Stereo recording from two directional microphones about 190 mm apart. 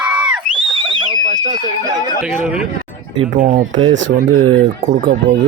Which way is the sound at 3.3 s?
45° right (ahead or behind).